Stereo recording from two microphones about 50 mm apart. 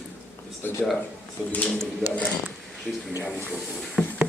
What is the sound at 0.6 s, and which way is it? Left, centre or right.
Speech, left.